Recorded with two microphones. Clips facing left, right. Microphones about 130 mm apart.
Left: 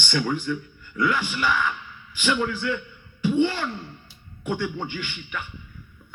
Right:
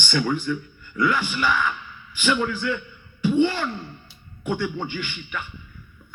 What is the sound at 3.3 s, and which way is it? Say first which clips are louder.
Speech: right 2 dB; 45° right (ahead or behind).